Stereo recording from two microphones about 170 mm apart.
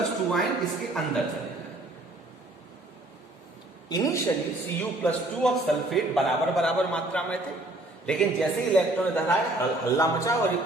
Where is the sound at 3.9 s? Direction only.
20° left (ahead or behind).